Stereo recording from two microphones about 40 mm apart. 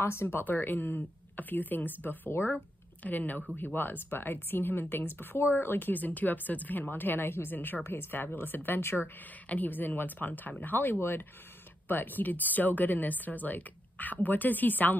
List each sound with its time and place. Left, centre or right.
0.0 s speech: left
0.4 s speech: left
7.5 s speech: left
7.8 s speech: left
11.0 s speech: left
11.9 s speech: left